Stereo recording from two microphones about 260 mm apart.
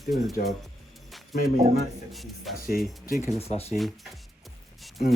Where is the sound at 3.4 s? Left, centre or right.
Left.